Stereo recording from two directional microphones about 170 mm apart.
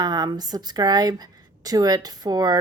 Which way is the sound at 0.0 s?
25° right (ahead or behind).